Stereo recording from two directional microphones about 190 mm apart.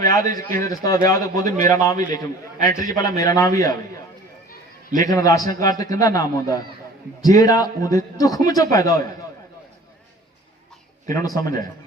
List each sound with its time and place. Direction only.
0.0 s a man's voice: 20° left (ahead or behind)
4.9 s a man's voice: 20° left (ahead or behind)
11.1 s a man's voice: 20° left (ahead or behind)